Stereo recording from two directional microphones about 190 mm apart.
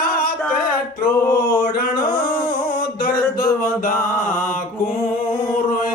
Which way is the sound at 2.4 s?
25° left (ahead or behind).